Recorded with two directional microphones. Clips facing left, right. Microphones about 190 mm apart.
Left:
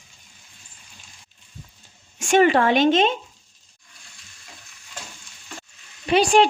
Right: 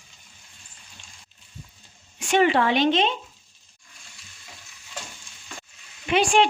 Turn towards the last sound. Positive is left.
turn(degrees=40)  # may be behind; listen again after turning